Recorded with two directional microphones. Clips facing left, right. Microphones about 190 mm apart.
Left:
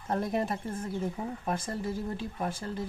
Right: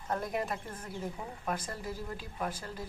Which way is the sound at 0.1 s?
30° left (ahead or behind).